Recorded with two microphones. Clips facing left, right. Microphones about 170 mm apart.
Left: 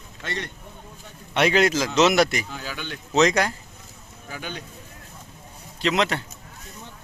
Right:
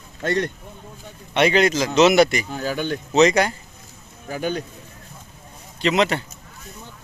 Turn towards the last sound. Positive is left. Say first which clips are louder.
# right 3 dB
turn(degrees=-5)  # may be behind; listen again after turning